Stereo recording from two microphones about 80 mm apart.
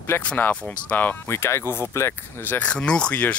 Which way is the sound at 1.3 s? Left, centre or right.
Left.